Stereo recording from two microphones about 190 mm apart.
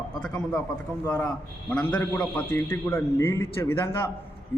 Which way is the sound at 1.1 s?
5° left (ahead or behind).